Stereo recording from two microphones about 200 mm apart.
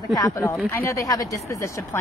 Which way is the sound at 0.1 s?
15° left (ahead or behind).